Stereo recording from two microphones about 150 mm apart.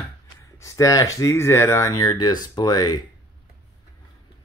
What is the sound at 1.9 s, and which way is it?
Speech, 30° left (ahead or behind).